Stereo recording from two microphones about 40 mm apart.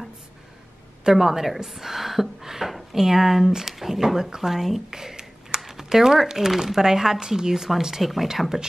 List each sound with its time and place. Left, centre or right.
1.1 s speech: centre